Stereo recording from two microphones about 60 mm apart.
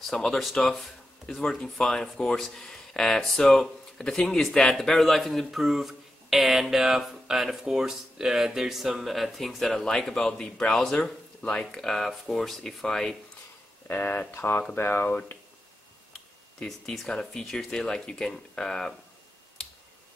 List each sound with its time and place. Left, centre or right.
0.0 s speech: centre
13.8 s speech: left
16.6 s speech: centre